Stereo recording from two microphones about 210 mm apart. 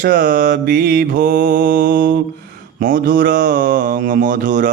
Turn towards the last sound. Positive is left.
turn(degrees=-40)  # may be behind; listen again after turning